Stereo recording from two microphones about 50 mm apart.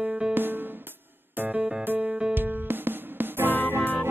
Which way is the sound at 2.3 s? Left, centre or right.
Right.